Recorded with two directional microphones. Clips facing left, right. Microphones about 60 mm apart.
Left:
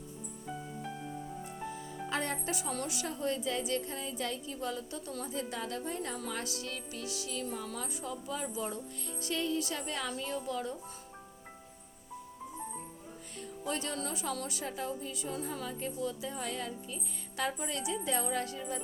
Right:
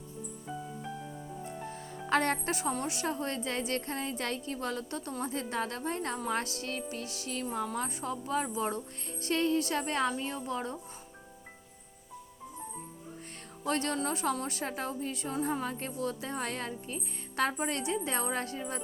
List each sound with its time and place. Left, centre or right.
2.0 s speech: right
2.8 s speech: right
6.2 s music: right
7.5 s speech: right
10.1 s music: right
13.7 s speech: right